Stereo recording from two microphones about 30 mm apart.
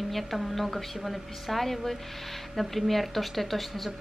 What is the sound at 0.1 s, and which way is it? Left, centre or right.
Speech, centre.